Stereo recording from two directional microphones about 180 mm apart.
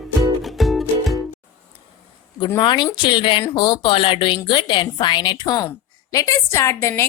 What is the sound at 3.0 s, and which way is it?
A woman's voice, 25° left (ahead or behind).